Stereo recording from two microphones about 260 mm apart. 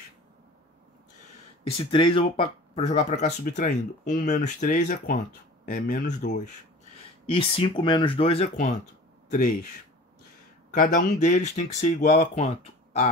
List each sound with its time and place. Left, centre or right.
1.8 s speech: centre
10.7 s speech: left